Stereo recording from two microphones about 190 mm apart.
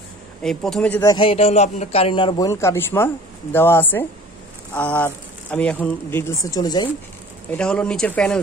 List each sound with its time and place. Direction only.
0.4 s speech: 5° left (ahead or behind)
1.0 s a man's voice: 25° left (ahead or behind)
7.5 s speech: 5° left (ahead or behind)